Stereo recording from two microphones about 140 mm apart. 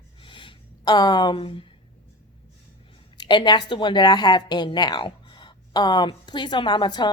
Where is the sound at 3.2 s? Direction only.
30° left (ahead or behind).